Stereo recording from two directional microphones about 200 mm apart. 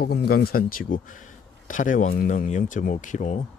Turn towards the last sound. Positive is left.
turn(degrees=35)  # may be behind; listen again after turning